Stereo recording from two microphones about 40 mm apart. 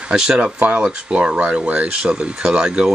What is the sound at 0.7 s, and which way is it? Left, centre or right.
Speech, right.